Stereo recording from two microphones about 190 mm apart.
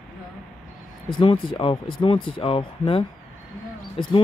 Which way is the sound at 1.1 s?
25° left (ahead or behind).